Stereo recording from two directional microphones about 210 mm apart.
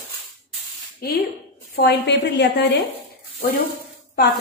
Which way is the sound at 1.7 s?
50° left (ahead or behind).